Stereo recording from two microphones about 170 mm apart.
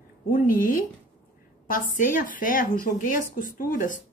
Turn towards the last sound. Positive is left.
turn(degrees=50)  # may be behind; listen again after turning